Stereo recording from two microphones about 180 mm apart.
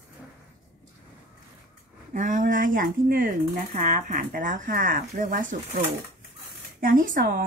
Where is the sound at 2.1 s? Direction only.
45° right (ahead or behind).